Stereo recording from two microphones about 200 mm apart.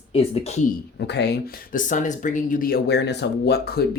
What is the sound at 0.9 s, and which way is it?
Speech, 60° left (ahead or behind).